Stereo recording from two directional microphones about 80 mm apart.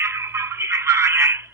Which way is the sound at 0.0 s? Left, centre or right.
Right.